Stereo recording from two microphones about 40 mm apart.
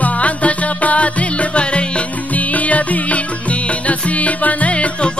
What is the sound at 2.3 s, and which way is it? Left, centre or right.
Music, left.